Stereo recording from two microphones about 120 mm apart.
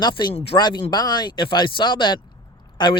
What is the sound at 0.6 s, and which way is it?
Speech, 40° left (ahead or behind).